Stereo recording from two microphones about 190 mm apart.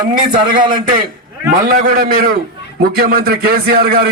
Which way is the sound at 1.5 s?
50° right (ahead or behind).